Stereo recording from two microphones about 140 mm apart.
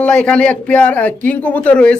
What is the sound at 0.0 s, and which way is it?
Speech, 5° left (ahead or behind).